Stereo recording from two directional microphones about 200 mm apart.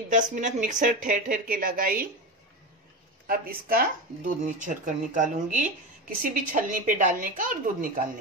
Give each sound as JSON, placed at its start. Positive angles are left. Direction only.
{"t": 0.1, "sound": "speech", "side_deg": -40}
{"t": 3.3, "sound": "speech", "side_deg": -45}